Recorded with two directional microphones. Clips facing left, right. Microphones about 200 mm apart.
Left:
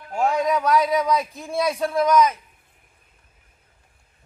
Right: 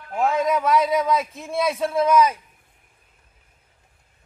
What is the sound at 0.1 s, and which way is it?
A man's voice, centre (ahead or behind).